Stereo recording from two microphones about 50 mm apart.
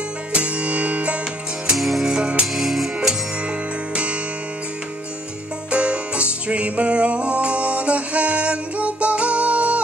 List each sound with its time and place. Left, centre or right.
0.3 s music: right
1.8 s music: centre
3.4 s music: right
5.7 s music: right